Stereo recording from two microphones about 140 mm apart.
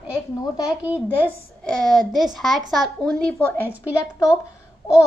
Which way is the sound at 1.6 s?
5° left (ahead or behind).